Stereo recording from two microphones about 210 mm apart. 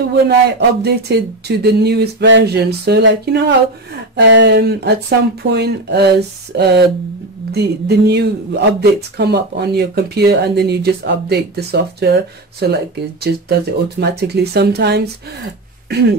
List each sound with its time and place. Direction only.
0.3 s speech: 50° right (ahead or behind)